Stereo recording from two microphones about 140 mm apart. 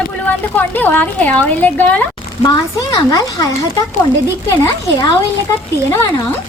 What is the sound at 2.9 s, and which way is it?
Speech, 25° left (ahead or behind).